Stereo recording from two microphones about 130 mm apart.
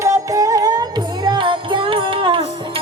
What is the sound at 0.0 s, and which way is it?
Music, 25° right (ahead or behind).